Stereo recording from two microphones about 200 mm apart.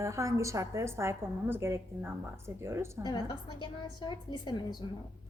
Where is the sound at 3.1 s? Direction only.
20° left (ahead or behind).